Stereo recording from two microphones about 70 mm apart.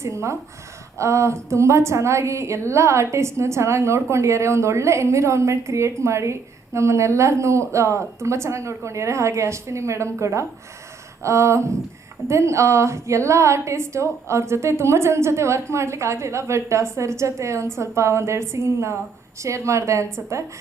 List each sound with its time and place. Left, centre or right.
0.0 s a woman's voice: right